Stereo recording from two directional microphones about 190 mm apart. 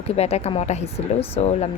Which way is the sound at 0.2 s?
35° left (ahead or behind).